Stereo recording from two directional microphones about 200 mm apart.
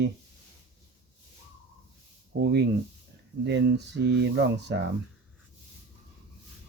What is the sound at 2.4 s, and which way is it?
Speech, 55° right (ahead or behind).